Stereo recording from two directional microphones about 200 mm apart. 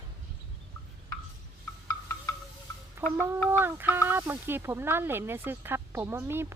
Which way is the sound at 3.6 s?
10° right (ahead or behind).